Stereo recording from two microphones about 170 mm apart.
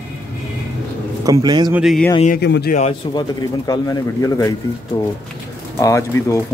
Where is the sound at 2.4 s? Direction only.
80° left.